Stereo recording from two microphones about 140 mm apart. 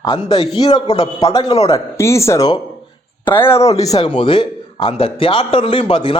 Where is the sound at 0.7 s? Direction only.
50° left (ahead or behind).